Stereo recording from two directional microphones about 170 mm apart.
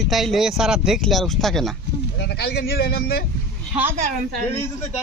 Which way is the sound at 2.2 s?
75° left (ahead or behind).